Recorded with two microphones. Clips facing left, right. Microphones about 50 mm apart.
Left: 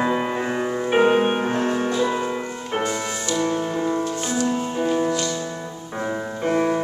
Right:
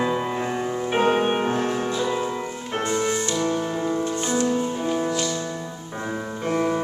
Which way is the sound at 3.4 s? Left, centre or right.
Centre.